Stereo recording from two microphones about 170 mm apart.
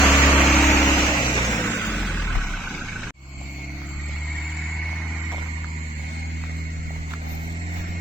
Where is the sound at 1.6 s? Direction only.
15° left (ahead or behind).